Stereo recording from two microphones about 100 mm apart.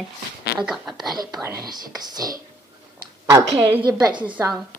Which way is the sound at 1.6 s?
40° right (ahead or behind).